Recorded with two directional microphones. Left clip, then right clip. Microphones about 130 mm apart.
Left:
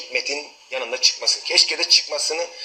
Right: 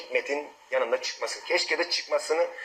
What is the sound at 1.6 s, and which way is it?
Speech, 30° left (ahead or behind).